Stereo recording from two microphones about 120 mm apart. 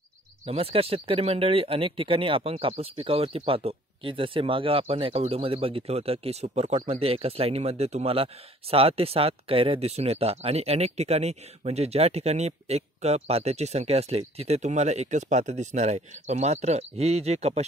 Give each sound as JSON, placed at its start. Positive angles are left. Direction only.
{"t": 0.5, "sound": "speech", "side_deg": -55}